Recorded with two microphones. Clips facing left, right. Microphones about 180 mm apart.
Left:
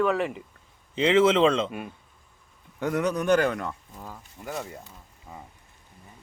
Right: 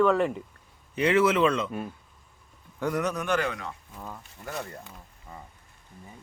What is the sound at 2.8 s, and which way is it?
Speech, 25° left (ahead or behind).